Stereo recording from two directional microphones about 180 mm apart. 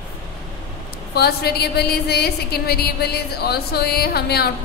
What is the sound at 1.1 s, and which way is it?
A woman's voice, 60° left (ahead or behind).